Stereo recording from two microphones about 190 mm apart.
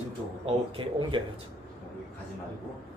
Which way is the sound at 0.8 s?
25° right (ahead or behind).